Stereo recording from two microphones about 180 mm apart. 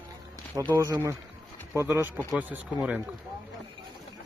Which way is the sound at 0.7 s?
20° right (ahead or behind).